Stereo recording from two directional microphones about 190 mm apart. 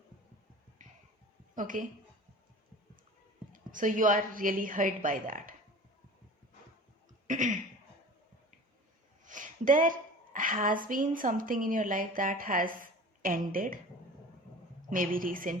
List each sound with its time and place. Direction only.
0.8 s music: 45° right (ahead or behind)
1.5 s a woman's voice: 45° right (ahead or behind)
3.5 s a woman's voice: 45° right (ahead or behind)
7.3 s a sound: 40° right (ahead or behind)
9.2 s a sound: 45° right (ahead or behind)
10.3 s a woman's voice: 45° right (ahead or behind)
14.8 s a woman's voice: 45° right (ahead or behind)